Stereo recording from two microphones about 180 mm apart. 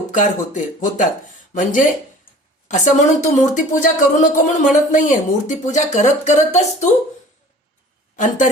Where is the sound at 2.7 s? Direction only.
40° left (ahead or behind).